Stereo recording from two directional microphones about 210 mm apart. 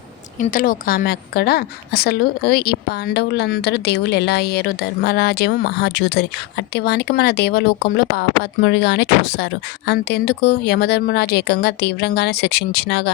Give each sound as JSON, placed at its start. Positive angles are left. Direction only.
{"t": 0.3, "sound": "a woman's voice", "side_deg": 40}